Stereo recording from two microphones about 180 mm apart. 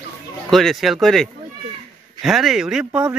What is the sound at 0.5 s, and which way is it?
Speech, centre (ahead or behind).